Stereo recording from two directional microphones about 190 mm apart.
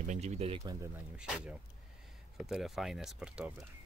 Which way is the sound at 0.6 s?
20° right (ahead or behind).